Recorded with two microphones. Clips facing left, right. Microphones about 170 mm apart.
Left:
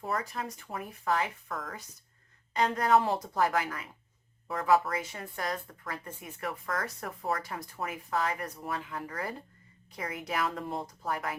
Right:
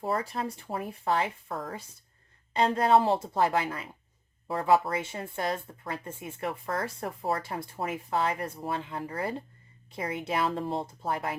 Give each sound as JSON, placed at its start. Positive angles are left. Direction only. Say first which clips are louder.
{"t": 0.0, "sound": "speech", "louder": "right 4 dB", "side_deg": -30}